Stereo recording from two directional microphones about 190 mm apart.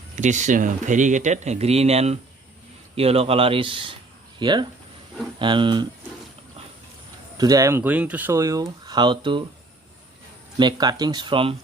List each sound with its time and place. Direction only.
0.2 s a man's voice: 40° right (ahead or behind); by 5.9 s 25° right (ahead or behind)
7.3 s speech: 20° right (ahead or behind)
10.6 s a man's voice: 20° right (ahead or behind)